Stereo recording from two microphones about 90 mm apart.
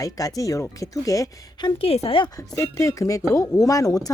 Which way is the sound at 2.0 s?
70° left (ahead or behind).